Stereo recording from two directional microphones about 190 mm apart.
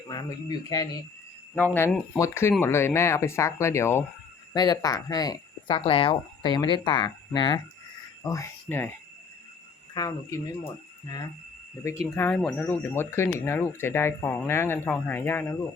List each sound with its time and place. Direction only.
0.1 s speech: 20° left (ahead or behind)
9.9 s speech: 15° left (ahead or behind)
12.1 s speech: 10° left (ahead or behind)